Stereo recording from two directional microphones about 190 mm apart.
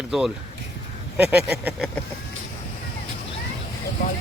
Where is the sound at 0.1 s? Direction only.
Centre (ahead or behind).